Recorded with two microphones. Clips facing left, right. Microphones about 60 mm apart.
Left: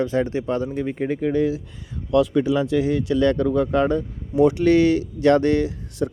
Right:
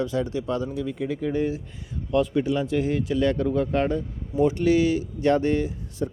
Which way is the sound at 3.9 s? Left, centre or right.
Left.